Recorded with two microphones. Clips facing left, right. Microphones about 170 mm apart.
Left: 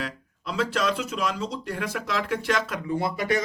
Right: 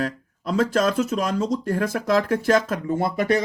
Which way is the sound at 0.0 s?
45° right (ahead or behind).